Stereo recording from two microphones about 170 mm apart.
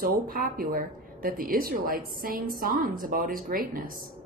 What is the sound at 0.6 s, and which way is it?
A woman's voice, 55° right (ahead or behind).